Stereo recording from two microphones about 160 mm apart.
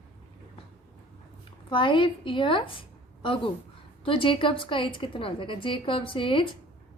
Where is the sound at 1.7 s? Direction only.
30° left (ahead or behind).